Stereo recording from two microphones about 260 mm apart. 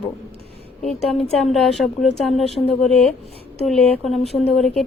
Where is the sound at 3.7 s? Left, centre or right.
Centre.